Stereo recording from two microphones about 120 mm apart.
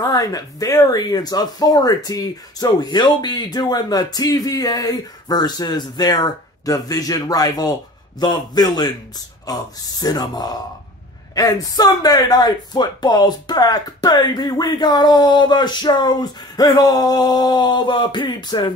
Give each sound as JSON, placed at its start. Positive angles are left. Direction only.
{"t": 0.0, "sound": "speech", "side_deg": 35}